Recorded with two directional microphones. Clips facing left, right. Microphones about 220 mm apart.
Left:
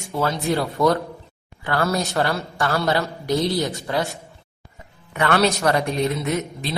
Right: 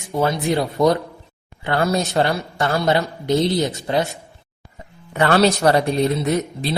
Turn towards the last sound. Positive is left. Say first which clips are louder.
# right 4 dB
turn(degrees=-35)  # may be behind; listen again after turning